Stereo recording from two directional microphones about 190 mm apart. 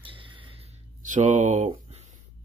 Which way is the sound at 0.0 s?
25° right (ahead or behind).